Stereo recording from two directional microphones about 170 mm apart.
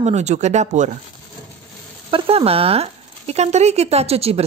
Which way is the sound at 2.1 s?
35° right (ahead or behind).